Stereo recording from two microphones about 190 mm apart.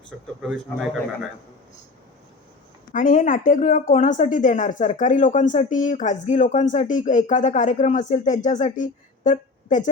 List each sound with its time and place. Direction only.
0.1 s a man's voice: 5° right (ahead or behind)
2.9 s speech: 45° left (ahead or behind)